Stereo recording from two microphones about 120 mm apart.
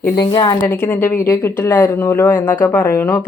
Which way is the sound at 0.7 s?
20° left (ahead or behind).